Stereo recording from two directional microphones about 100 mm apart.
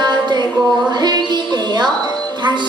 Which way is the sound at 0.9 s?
45° right (ahead or behind).